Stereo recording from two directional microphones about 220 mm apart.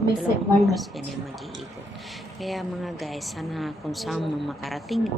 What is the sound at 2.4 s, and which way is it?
A woman's voice, centre (ahead or behind).